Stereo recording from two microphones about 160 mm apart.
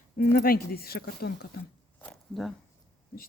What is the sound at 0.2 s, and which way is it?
Speech, 65° left (ahead or behind).